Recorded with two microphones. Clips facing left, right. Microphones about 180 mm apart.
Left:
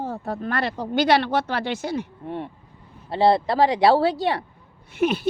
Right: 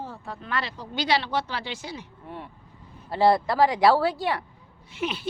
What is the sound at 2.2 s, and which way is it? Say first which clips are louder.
Speech: left 8 dB; 25° left (ahead or behind).